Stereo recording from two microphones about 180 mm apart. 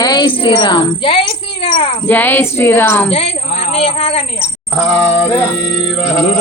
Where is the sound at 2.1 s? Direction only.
10° left (ahead or behind).